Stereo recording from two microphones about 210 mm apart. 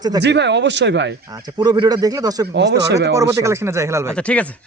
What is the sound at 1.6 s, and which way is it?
Speech, 20° right (ahead or behind).